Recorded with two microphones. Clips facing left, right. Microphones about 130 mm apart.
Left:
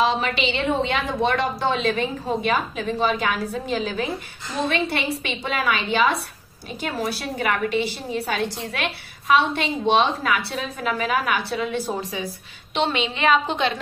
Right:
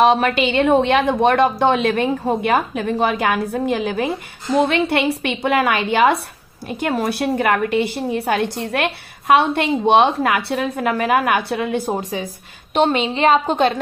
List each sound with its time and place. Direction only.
0.0 s a woman's voice: 55° right (ahead or behind)